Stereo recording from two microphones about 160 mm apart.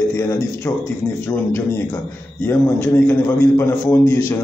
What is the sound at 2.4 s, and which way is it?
A man's voice, 15° left (ahead or behind).